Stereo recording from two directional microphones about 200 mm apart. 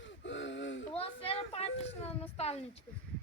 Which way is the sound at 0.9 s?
30° left (ahead or behind).